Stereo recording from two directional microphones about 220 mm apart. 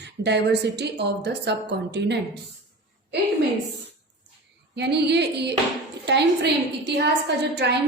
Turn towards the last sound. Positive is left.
turn(degrees=-50)  # may be behind; listen again after turning